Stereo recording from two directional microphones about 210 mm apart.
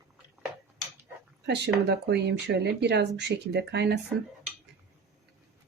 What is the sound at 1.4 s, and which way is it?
Speech, 55° right (ahead or behind).